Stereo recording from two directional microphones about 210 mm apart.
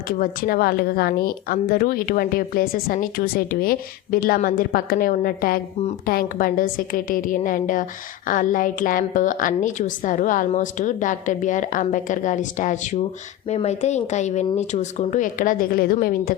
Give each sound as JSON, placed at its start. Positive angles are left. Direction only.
{"t": 0.2, "sound": "a woman's voice", "side_deg": 45}